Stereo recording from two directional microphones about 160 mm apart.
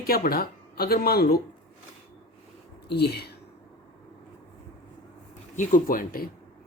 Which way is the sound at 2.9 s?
90° left.